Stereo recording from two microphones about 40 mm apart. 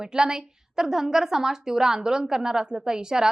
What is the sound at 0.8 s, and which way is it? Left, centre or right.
A woman's voice, centre.